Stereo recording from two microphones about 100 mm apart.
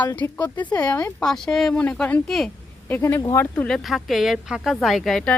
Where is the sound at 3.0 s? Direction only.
30° left (ahead or behind).